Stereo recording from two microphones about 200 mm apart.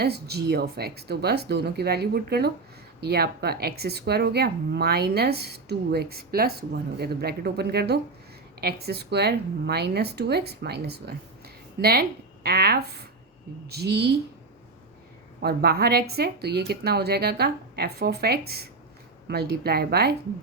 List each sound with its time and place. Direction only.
0.0 s a woman's voice: 55° right (ahead or behind)
15.4 s speech: 50° right (ahead or behind)